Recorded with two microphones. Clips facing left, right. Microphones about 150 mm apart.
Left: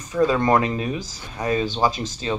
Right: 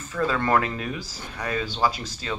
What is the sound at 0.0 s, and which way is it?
Speech, 15° left (ahead or behind).